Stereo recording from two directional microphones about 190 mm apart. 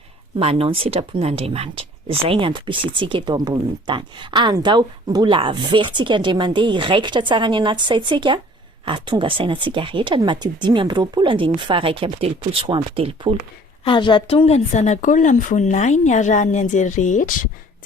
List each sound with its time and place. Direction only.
0.3 s speech: 30° right (ahead or behind)
13.8 s a woman's voice: 25° left (ahead or behind); by 17.3 s 40° left (ahead or behind)